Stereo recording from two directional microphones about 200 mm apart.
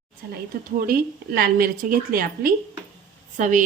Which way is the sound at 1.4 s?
45° right (ahead or behind).